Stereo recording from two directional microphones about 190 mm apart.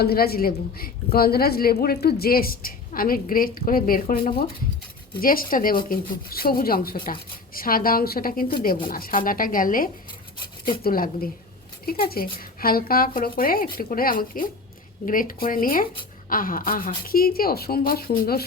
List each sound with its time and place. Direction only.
0.0 s a woman's voice: 55° left (ahead or behind)
10.3 s rub: 25° left (ahead or behind)
10.8 s a woman's voice: 50° left (ahead or behind)